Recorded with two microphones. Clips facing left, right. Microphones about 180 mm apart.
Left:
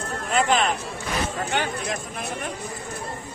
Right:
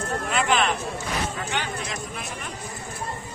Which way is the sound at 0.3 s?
40° left (ahead or behind).